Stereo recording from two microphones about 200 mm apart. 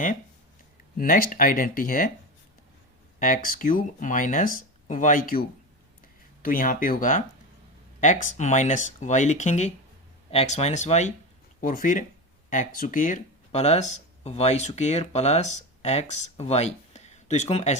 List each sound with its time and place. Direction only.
0.9 s speech: 45° left (ahead or behind)
3.2 s speech: 40° left (ahead or behind)